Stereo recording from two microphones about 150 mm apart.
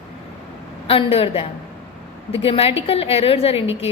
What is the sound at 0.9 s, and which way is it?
A woman's voice, 40° left (ahead or behind).